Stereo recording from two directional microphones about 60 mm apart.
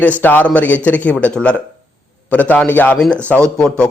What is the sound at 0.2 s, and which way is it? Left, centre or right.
A man's voice, left.